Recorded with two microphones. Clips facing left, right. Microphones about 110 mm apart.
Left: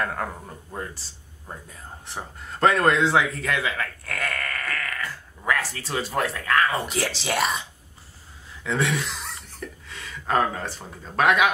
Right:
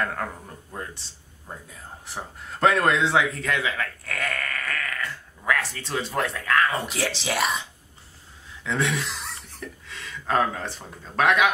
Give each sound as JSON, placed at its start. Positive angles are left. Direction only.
{"t": 0.0, "sound": "speech", "side_deg": 5}
{"t": 8.6, "sound": "speech", "side_deg": 0}